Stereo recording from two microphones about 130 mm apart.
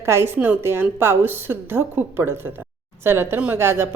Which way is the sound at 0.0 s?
20° right (ahead or behind).